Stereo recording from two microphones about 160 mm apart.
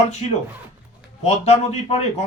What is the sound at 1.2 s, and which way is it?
Speech, 40° left (ahead or behind).